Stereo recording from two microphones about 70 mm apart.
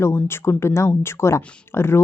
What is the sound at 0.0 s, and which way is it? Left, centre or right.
Speech, left.